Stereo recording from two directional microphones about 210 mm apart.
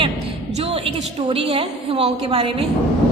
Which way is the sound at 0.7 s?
25° right (ahead or behind).